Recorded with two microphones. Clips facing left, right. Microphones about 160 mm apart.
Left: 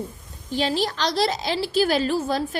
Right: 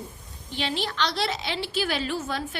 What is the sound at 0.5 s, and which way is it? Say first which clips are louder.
A woman's voice: left 6 dB; 40° left (ahead or behind).